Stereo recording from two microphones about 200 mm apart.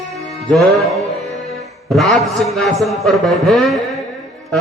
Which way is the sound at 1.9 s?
Centre (ahead or behind).